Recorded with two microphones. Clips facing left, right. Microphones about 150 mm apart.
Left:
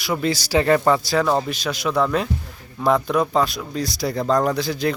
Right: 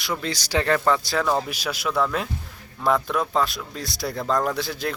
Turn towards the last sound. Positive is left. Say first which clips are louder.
# left 5 dB
turn(degrees=0)  # may be behind; listen again after turning